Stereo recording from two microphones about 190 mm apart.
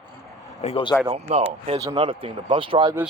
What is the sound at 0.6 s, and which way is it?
Speech, 30° left (ahead or behind).